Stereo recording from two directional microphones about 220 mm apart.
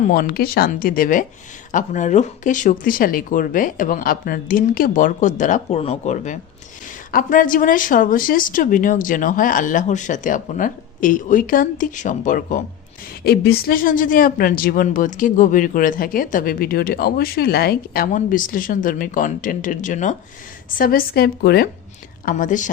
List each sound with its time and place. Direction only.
0.1 s speech: 45° left (ahead or behind)
13.2 s a woman's voice: 45° left (ahead or behind)